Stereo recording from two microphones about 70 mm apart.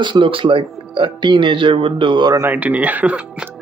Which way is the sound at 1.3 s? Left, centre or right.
Right.